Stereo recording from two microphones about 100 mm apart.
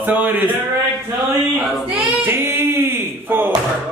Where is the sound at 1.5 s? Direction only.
Centre (ahead or behind).